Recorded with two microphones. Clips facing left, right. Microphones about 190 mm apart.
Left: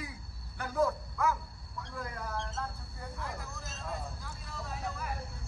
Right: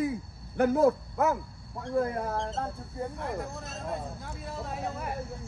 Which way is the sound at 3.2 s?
60° right (ahead or behind).